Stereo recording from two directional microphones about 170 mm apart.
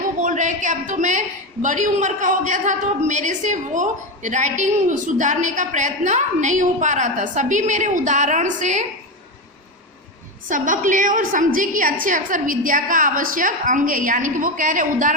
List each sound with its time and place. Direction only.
0.2 s a woman's voice: 50° right (ahead or behind)
10.5 s a woman's voice: 50° right (ahead or behind)